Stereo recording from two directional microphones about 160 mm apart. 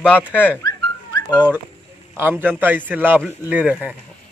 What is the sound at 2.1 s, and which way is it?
Speech, 15° right (ahead or behind).